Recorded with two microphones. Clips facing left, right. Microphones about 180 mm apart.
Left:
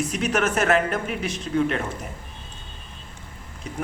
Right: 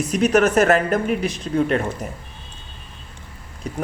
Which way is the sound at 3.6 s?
35° right (ahead or behind).